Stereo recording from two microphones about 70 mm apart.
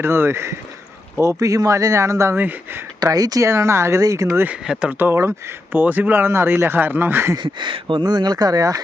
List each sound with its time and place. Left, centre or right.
0.0 s speech: right
1.2 s speech: right
2.3 s speech: right
3.0 s speech: right
3.4 s speech: right
4.3 s speech: right
4.6 s speech: centre
4.9 s speech: right
5.7 s speech: right
8.0 s speech: right